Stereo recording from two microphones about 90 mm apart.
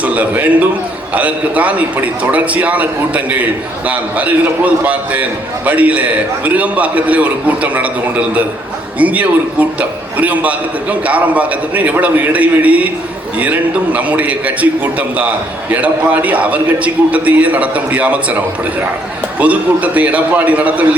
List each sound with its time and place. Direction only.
0.0 s a man's voice: 15° right (ahead or behind)